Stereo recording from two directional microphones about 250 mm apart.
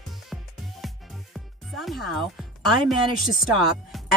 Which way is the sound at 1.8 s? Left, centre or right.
Centre.